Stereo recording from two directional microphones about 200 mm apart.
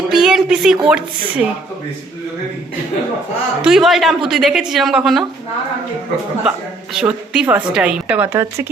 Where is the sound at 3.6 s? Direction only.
Centre (ahead or behind).